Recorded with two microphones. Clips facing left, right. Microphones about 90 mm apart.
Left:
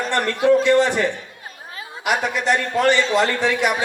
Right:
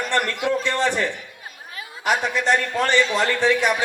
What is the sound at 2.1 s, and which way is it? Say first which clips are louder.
A man's voice: left 1 dB; 35° left (ahead or behind).